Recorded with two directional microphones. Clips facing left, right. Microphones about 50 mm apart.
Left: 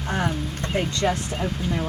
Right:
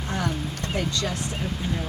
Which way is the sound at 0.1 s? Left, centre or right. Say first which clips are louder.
Left 3 dB; left.